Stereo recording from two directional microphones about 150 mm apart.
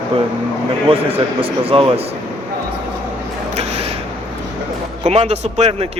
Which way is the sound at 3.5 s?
45° right (ahead or behind).